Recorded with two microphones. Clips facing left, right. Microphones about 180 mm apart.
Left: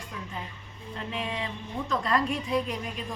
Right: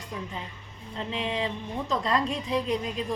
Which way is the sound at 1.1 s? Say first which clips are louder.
Right 4 dB; 25° right (ahead or behind).